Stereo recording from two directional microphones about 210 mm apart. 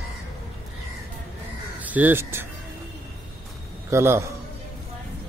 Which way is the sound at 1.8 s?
10° right (ahead or behind).